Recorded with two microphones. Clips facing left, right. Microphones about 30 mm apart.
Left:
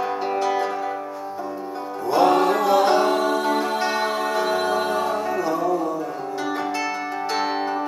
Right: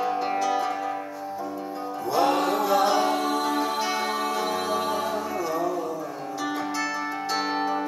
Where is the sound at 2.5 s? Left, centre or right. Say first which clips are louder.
Left 4 dB; left.